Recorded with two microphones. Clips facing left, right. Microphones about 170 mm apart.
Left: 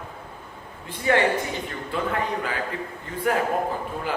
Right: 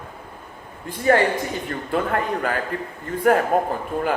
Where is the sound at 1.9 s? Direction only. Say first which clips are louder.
Right 4 dB; 55° right (ahead or behind).